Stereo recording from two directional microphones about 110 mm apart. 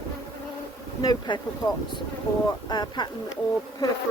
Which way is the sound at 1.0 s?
40° left (ahead or behind).